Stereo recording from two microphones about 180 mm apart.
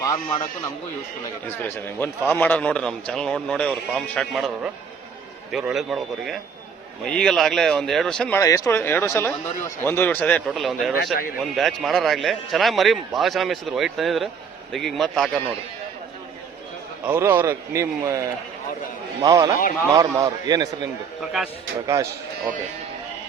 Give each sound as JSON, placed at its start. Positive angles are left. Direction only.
{"t": 1.5, "sound": "a man's voice", "side_deg": 10}
{"t": 8.4, "sound": "speech", "side_deg": 15}
{"t": 10.5, "sound": "a man's voice", "side_deg": 0}
{"t": 10.9, "sound": "a man's voice", "side_deg": 55}
{"t": 11.5, "sound": "a man's voice", "side_deg": 0}
{"t": 17.1, "sound": "a man's voice", "side_deg": -10}
{"t": 21.2, "sound": "a man's voice", "side_deg": 0}